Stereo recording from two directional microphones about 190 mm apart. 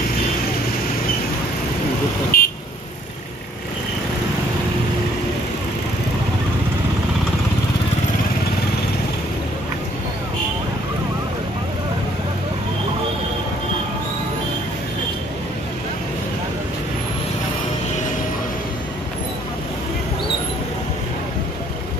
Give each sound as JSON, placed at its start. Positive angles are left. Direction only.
{"t": 2.3, "sound": "vehicle", "side_deg": 50}